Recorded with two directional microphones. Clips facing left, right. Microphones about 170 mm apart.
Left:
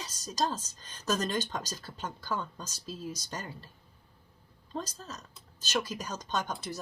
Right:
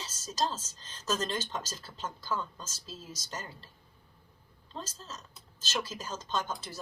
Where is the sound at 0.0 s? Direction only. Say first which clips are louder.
Left 1 dB; 15° left (ahead or behind).